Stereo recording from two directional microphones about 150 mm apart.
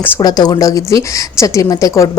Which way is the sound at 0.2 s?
25° left (ahead or behind).